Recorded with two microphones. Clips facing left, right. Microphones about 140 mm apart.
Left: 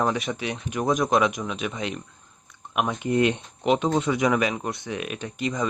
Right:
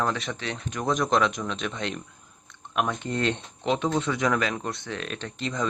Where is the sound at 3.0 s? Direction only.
15° left (ahead or behind).